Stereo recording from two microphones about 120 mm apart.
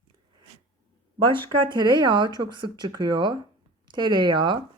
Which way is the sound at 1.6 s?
40° right (ahead or behind).